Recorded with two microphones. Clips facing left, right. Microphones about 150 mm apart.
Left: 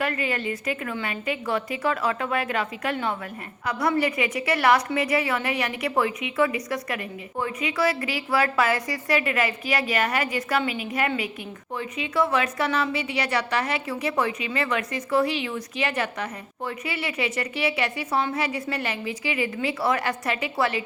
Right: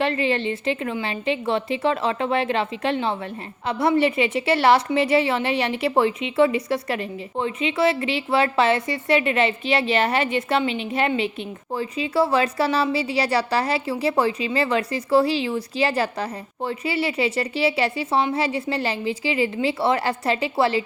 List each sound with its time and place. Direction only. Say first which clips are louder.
0.0 s a woman's voice: right 5 dB; 25° right (ahead or behind)